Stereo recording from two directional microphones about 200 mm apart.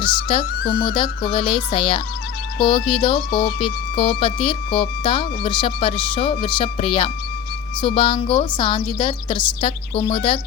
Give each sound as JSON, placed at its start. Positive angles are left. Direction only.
{"t": 0.0, "sound": "speech", "side_deg": 25}